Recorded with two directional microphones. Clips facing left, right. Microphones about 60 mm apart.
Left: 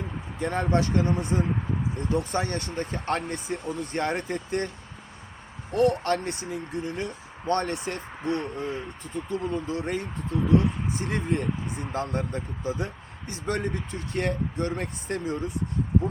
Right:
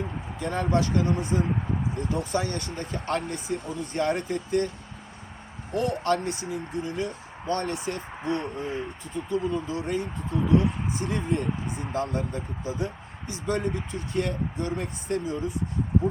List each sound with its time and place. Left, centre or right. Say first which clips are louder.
0.3 s speech: left 1 dB; left
1.0 s speech: even; centre
2.0 s speech: left 2 dB; left
5.7 s speech: left 2 dB; left
8.1 s speech: left 1 dB; centre
9.1 s speech: right 2 dB; left
10.3 s speech: even; centre
10.9 s speech: even; left
11.6 s speech: even; centre
11.9 s speech: right 1 dB; left